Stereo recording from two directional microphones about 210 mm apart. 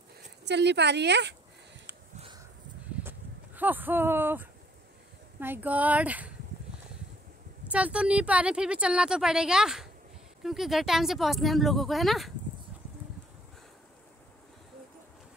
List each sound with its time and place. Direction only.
0.5 s a woman's voice: 55° right (ahead or behind)
3.0 s a sound: 10° right (ahead or behind)
5.4 s speech: 10° right (ahead or behind)
7.7 s a woman's voice: 5° right (ahead or behind)